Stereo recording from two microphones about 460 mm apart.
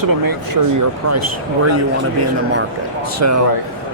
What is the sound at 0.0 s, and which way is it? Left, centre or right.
Speech, right.